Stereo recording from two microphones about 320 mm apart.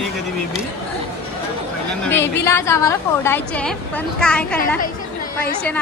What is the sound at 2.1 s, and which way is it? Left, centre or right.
A woman's voice, centre.